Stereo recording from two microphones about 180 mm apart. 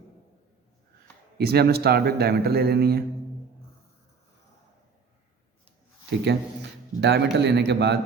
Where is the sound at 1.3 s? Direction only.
60° right (ahead or behind).